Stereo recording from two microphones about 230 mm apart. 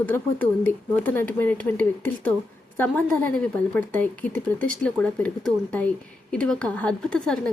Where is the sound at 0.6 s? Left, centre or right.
Centre.